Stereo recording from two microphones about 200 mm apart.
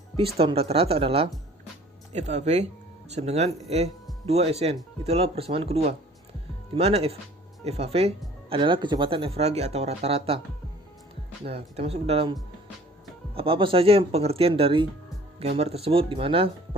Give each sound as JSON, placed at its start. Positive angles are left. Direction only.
{"t": 0.2, "sound": "speech", "side_deg": -30}
{"t": 11.4, "sound": "speech", "side_deg": -30}